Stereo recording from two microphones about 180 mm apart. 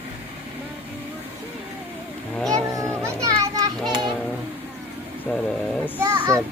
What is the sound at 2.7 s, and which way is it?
Children playing, 15° right (ahead or behind).